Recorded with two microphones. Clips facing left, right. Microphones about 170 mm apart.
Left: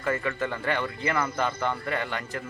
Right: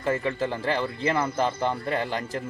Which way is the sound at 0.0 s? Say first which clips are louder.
Right 2 dB; 30° right (ahead or behind).